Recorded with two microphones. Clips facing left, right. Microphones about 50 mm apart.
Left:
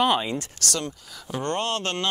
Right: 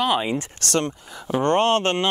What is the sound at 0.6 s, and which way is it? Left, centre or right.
Speech, right.